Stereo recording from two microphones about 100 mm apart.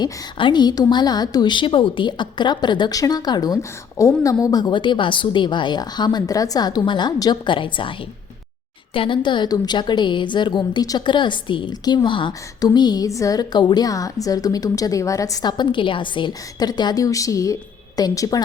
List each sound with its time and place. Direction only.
0.0 s a woman's voice: 50° left (ahead or behind)
12.5 s a woman's voice: 40° left (ahead or behind)